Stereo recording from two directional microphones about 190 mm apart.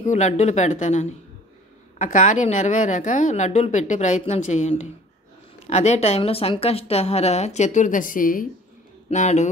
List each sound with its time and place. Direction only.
0.0 s a woman's voice: 35° left (ahead or behind)